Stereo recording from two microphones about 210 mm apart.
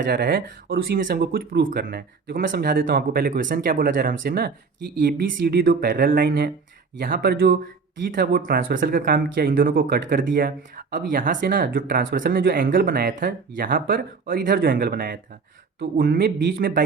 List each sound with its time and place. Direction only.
0.1 s speech: 45° right (ahead or behind)